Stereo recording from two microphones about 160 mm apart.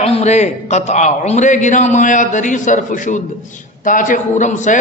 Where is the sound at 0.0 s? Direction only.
40° left (ahead or behind).